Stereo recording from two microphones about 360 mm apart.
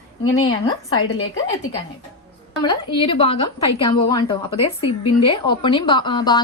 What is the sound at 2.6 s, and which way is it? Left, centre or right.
A woman's voice, centre.